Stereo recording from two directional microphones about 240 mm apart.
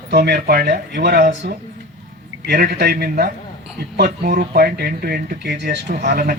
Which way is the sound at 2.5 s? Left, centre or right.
Right.